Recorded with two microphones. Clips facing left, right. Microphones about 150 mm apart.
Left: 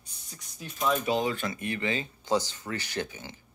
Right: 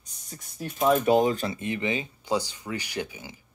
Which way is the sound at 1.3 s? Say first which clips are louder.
Right 4 dB; 35° right (ahead or behind).